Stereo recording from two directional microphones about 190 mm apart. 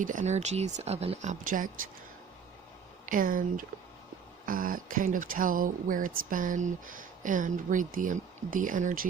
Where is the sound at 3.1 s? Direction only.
45° right (ahead or behind).